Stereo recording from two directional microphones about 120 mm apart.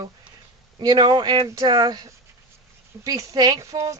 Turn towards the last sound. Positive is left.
turn(degrees=-25)  # may be behind; listen again after turning